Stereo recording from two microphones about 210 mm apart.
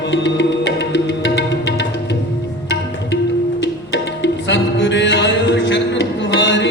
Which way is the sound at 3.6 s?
60° left (ahead or behind).